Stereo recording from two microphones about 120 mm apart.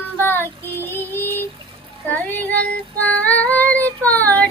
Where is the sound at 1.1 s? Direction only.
15° left (ahead or behind).